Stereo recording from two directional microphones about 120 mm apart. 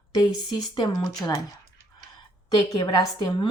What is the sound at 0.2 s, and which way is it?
Speech, 40° left (ahead or behind).